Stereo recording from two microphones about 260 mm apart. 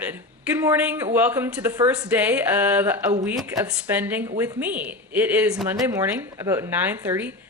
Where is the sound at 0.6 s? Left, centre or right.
Centre.